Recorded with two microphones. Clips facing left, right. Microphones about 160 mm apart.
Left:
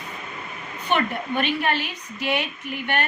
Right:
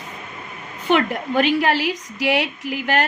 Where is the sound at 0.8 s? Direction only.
90° right.